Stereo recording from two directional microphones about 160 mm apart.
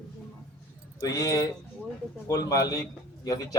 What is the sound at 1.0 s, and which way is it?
A man's voice, 20° left (ahead or behind).